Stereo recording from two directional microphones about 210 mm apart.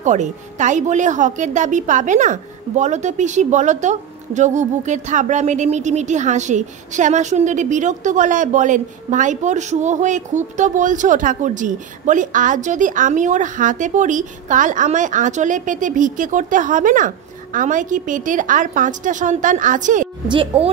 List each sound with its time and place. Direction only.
0.0 s a woman's voice: 35° right (ahead or behind)